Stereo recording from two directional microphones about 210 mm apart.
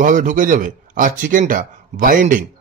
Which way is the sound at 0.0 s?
40° right (ahead or behind).